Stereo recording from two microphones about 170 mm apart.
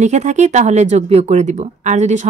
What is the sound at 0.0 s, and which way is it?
A woman's voice, 45° right (ahead or behind).